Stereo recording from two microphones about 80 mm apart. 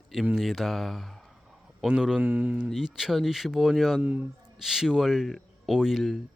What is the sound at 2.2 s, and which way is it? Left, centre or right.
Speech, right.